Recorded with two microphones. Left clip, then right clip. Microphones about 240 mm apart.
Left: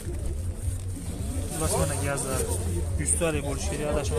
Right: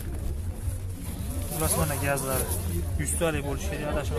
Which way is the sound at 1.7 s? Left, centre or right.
Centre.